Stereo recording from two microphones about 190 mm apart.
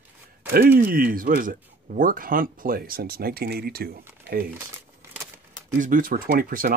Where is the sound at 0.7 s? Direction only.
50° right (ahead or behind).